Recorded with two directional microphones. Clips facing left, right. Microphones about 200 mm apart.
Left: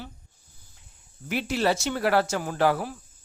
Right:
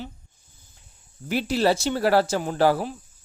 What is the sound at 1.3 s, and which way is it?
Speech, 35° right (ahead or behind).